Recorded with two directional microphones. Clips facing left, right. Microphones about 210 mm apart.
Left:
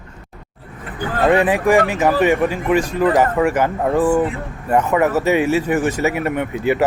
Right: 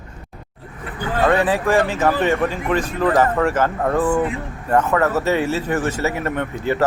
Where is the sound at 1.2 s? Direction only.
15° left (ahead or behind).